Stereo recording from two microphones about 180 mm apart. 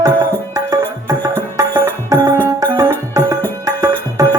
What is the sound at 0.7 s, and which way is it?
Music, 20° right (ahead or behind).